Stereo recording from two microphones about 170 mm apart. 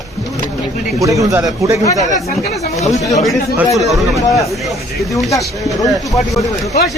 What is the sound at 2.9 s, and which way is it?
Speech, 20° left (ahead or behind).